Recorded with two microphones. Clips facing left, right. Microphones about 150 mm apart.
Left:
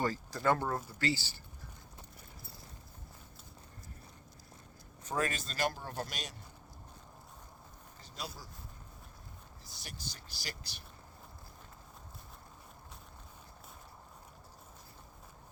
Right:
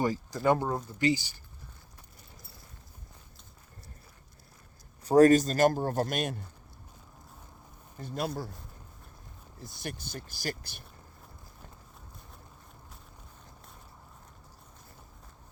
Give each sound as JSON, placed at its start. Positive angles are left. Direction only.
{"t": 0.0, "sound": "speech", "side_deg": -15}
{"t": 5.0, "sound": "speech", "side_deg": -40}
{"t": 7.9, "sound": "speech", "side_deg": -55}
{"t": 9.6, "sound": "speech", "side_deg": -55}